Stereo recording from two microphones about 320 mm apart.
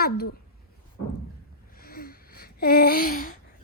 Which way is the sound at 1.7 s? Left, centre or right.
Left.